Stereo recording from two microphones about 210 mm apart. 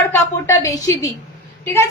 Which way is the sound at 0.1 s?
15° left (ahead or behind).